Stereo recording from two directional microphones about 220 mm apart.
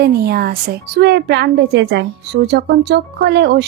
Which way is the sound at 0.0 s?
45° right (ahead or behind).